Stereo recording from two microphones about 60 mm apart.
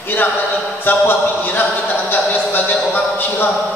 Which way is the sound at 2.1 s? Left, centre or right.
Left.